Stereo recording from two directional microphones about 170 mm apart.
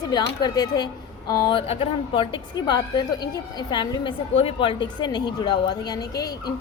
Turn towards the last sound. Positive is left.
turn(degrees=20)  # may be behind; listen again after turning